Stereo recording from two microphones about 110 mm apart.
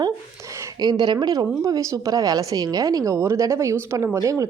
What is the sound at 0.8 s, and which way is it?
Speech, 40° right (ahead or behind).